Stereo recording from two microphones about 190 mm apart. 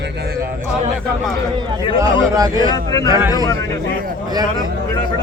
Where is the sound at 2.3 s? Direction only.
20° right (ahead or behind).